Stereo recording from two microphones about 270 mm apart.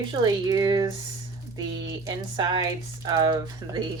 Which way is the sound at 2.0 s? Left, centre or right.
Centre.